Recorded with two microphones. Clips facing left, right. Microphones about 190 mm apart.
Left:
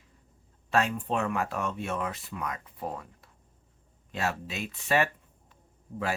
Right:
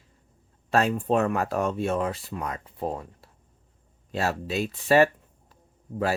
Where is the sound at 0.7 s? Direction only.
40° right (ahead or behind).